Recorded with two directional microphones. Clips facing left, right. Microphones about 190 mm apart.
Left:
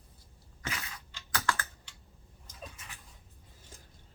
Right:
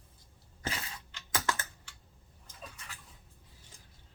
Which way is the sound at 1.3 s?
20° right (ahead or behind).